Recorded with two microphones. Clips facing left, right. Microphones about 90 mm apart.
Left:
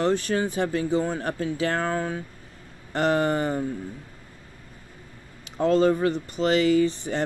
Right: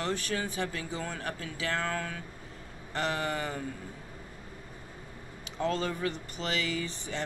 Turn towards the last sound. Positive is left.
turn(degrees=40)  # may be behind; listen again after turning